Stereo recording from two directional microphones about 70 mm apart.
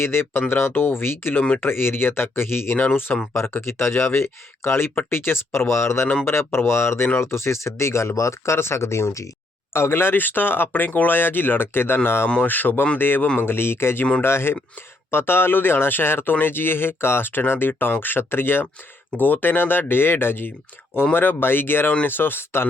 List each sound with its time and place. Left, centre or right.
0.0 s speech: left